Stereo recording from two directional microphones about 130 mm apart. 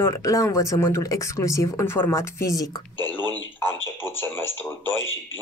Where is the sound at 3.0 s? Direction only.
35° right (ahead or behind).